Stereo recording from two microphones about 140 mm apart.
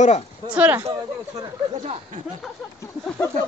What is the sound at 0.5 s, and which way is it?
Speech, 10° right (ahead or behind).